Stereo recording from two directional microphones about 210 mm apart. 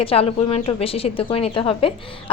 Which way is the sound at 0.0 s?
25° left (ahead or behind).